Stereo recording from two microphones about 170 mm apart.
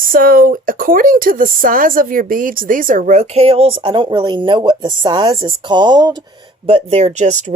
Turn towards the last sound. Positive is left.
turn(degrees=-45)  # may be behind; listen again after turning